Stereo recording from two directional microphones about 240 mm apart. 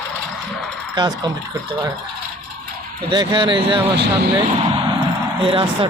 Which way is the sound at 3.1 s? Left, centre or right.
Centre.